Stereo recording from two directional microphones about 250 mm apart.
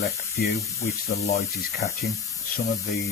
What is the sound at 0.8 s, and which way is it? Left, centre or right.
Speech, left.